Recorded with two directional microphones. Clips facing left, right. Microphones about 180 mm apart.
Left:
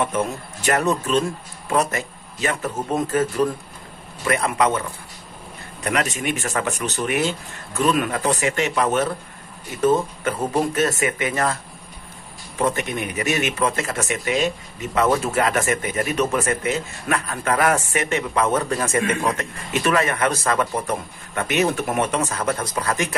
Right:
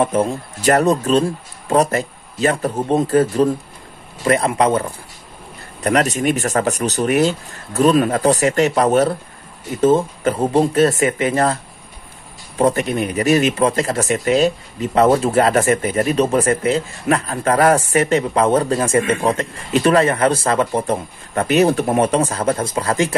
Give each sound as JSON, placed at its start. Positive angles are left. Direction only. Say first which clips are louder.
{"t": 0.0, "sound": "speech", "louder": "right 6 dB", "side_deg": -35}
{"t": 5.9, "sound": "speech", "louder": "right 7 dB", "side_deg": -35}
{"t": 12.5, "sound": "speech", "louder": "right 6 dB", "side_deg": -35}